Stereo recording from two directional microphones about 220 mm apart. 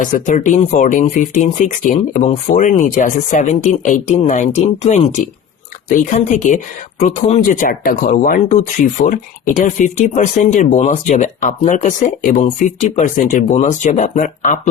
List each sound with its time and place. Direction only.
0.0 s speech: 35° left (ahead or behind)